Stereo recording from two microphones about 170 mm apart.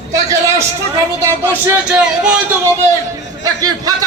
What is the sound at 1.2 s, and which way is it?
A man's voice, 15° right (ahead or behind).